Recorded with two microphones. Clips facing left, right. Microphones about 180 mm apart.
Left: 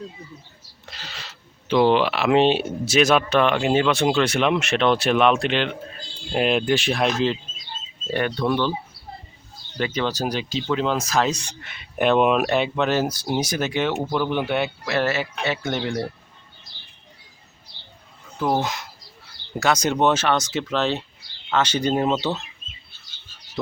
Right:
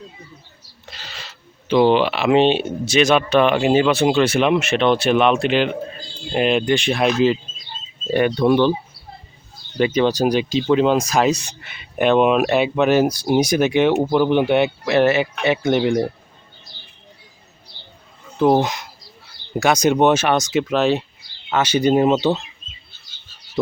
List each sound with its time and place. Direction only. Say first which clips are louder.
0.9 s speech: right 1 dB; centre (ahead or behind)
8.1 s speech: right 7 dB; 15° right (ahead or behind)
9.7 s speech: right 8 dB; 20° right (ahead or behind)
18.3 s speech: right 7 dB; 25° right (ahead or behind)